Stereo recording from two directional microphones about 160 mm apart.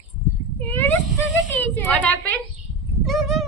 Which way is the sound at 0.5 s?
15° left (ahead or behind).